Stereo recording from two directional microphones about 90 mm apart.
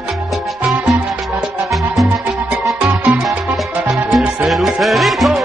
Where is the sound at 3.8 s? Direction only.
5° right (ahead or behind).